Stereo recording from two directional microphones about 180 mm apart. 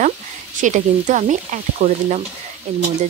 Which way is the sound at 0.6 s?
40° right (ahead or behind).